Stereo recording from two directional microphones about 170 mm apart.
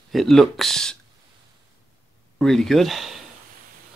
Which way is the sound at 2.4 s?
Centre (ahead or behind).